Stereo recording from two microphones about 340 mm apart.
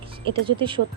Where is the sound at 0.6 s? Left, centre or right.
Centre.